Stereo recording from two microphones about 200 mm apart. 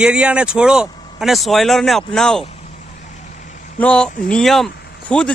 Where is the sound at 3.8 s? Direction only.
5° left (ahead or behind).